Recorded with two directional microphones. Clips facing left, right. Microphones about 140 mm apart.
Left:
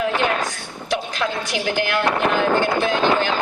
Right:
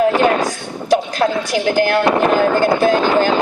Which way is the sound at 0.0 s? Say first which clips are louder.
Right 7 dB; 40° right (ahead or behind).